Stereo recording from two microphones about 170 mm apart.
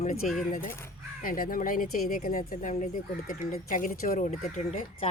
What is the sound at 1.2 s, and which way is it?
Speech, 55° left (ahead or behind).